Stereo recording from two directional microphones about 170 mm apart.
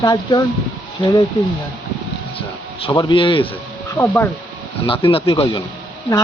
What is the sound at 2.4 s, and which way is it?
Speech, 30° left (ahead or behind).